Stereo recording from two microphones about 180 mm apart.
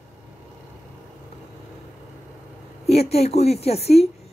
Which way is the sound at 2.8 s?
35° left (ahead or behind).